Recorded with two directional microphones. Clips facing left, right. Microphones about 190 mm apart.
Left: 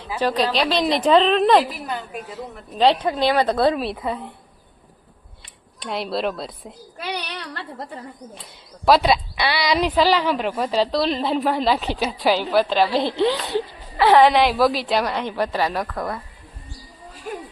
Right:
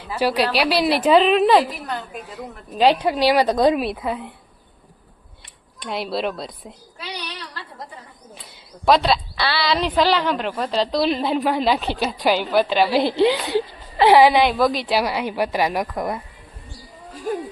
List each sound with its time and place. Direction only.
0.2 s a woman's voice: 10° right (ahead or behind)
2.7 s a woman's voice: 10° right (ahead or behind)
5.8 s a woman's voice: centre (ahead or behind)
7.0 s child singing: 55° left (ahead or behind)
8.8 s a woman's voice: 5° left (ahead or behind)
9.0 s a woman's voice: 15° left (ahead or behind)
11.0 s a woman's voice: 5° right (ahead or behind)